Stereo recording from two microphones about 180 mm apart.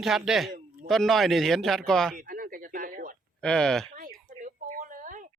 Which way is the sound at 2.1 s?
50° right (ahead or behind).